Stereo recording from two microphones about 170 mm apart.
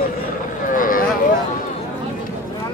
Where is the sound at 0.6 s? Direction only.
55° left (ahead or behind).